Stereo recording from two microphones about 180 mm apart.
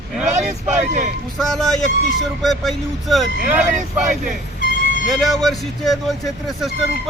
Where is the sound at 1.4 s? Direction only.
Centre (ahead or behind).